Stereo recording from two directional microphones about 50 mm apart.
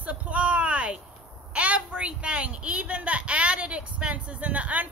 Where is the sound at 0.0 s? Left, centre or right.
Right.